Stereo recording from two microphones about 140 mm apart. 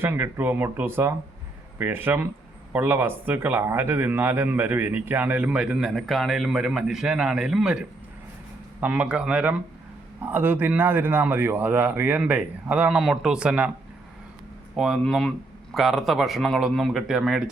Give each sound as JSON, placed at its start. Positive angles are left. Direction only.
{"t": 0.0, "sound": "a man's voice", "side_deg": -15}
{"t": 14.8, "sound": "speech", "side_deg": 0}